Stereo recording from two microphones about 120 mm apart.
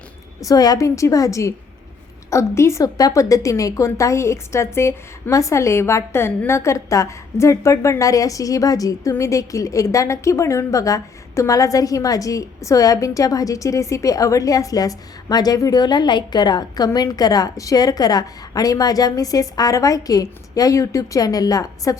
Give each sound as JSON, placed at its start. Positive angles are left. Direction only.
{"t": 0.4, "sound": "a woman's voice", "side_deg": 30}